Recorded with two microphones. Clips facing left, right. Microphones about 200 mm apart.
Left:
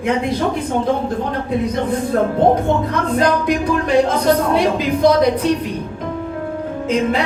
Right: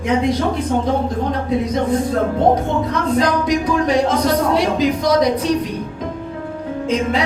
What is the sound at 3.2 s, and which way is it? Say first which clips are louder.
A woman's voice: left 2 dB; 55° left (ahead or behind).